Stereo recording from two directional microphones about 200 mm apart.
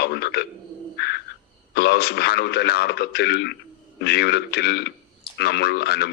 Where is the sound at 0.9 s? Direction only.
55° left (ahead or behind).